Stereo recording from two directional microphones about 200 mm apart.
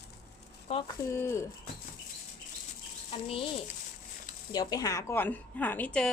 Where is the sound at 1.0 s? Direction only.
15° left (ahead or behind).